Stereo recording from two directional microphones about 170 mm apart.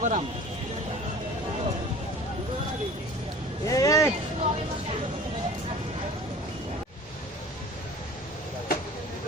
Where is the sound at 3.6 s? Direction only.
20° left (ahead or behind).